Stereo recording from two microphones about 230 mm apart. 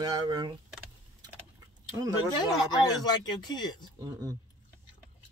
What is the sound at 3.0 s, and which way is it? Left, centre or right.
Speech, centre.